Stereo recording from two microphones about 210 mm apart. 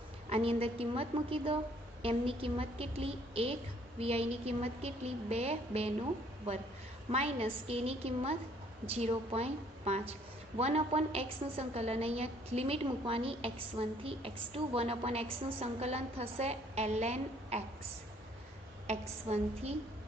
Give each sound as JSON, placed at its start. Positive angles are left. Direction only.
{"t": 0.3, "sound": "a woman's voice", "side_deg": -30}
{"t": 18.9, "sound": "a woman's voice", "side_deg": -30}